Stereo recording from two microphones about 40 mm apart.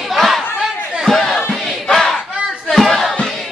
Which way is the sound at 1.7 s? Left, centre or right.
Centre.